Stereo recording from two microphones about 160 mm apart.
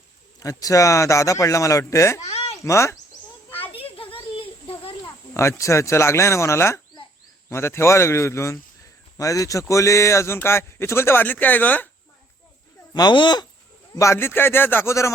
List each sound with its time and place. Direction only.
0.3 s speech: 20° left (ahead or behind)
2.2 s a sound: 40° left (ahead or behind)
2.6 s speech: 20° left (ahead or behind)
3.7 s a sound: 35° left (ahead or behind)
5.3 s a man's voice: 15° left (ahead or behind)
12.9 s a man's voice: 25° left (ahead or behind)